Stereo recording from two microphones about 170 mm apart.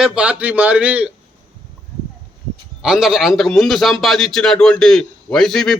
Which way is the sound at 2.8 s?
5° right (ahead or behind).